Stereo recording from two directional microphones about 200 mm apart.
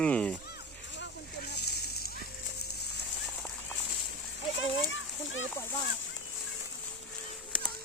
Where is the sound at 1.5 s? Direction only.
55° left (ahead or behind).